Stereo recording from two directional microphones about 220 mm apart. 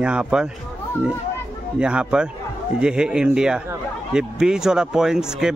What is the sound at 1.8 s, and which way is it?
Speech, 5° right (ahead or behind).